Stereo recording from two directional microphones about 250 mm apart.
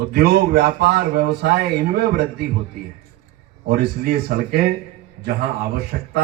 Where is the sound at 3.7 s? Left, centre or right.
Right.